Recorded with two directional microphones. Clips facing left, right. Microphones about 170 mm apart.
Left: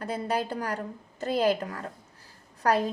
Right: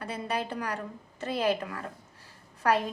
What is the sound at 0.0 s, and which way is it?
A woman's voice, 40° left (ahead or behind).